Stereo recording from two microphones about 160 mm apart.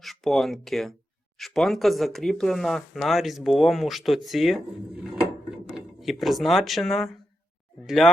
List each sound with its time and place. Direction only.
0.0 s speech: centre (ahead or behind)
5.7 s speech: centre (ahead or behind)